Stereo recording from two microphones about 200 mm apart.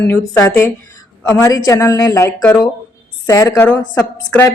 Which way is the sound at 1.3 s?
10° left (ahead or behind).